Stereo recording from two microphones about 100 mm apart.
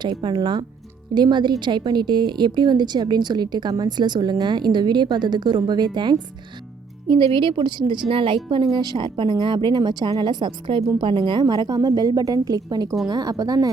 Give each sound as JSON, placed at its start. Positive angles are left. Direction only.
{"t": 0.0, "sound": "a woman's voice", "side_deg": -50}
{"t": 8.7, "sound": "a woman's voice", "side_deg": -45}